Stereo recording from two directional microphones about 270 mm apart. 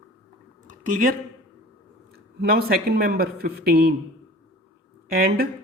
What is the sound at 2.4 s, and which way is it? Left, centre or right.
A man's voice, right.